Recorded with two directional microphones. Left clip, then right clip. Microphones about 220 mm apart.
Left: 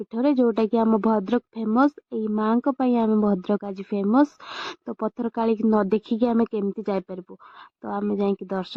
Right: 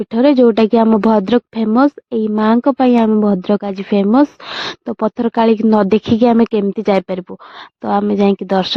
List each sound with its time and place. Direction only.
0.1 s speech: 30° right (ahead or behind)